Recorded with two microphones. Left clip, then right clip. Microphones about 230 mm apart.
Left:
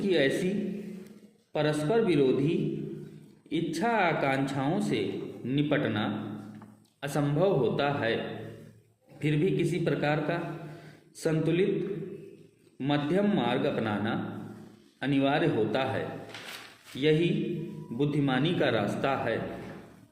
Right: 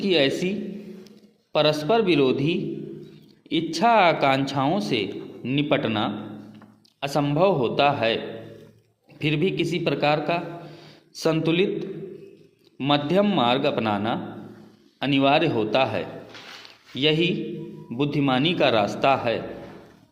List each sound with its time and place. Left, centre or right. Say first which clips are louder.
0.0 s a man's voice: right 6 dB; right
1.5 s a man's voice: right 7 dB; right